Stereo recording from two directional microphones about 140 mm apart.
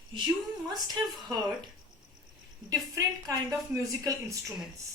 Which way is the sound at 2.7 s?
25° right (ahead or behind).